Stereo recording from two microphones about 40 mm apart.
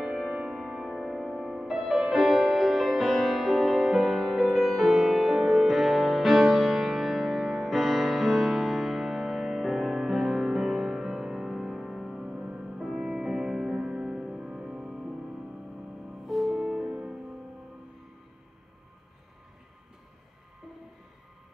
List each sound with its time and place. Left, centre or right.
0.0 s music: centre
1.4 s music: centre
1.7 s music: centre; by 14.1 s right
14.1 s music: centre
14.8 s music: centre
16.3 s music: centre; by 17.2 s right